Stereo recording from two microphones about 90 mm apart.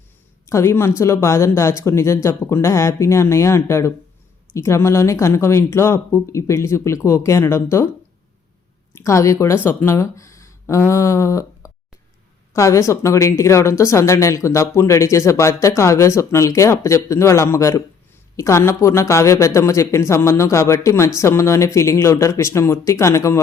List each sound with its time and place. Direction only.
0.4 s a woman's voice: 30° left (ahead or behind)
8.9 s a woman's voice: 30° left (ahead or behind)